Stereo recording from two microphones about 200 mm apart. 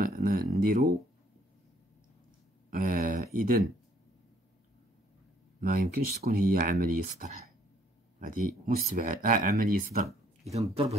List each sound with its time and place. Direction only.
0.0 s a sound: 45° right (ahead or behind)
2.7 s speech: 40° right (ahead or behind)
5.6 s speech: 45° right (ahead or behind)